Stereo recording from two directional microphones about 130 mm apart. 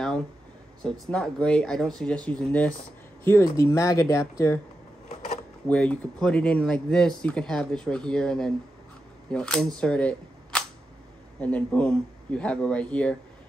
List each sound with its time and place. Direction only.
0.8 s speech: 5° left (ahead or behind)
3.3 s speech: 20° left (ahead or behind)
5.7 s speech: 10° left (ahead or behind)
9.8 s camera: 5° left (ahead or behind)
11.4 s speech: 10° left (ahead or behind)